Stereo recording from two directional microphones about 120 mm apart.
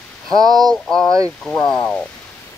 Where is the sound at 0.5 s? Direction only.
35° right (ahead or behind).